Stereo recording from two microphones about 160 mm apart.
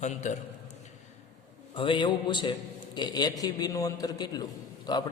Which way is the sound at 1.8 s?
30° left (ahead or behind).